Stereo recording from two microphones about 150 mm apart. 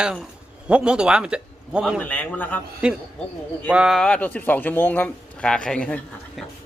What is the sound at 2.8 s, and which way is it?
A man's voice, 5° right (ahead or behind).